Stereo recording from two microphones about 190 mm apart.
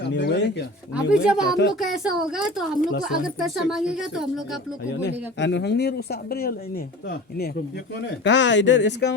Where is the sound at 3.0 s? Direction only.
Centre (ahead or behind).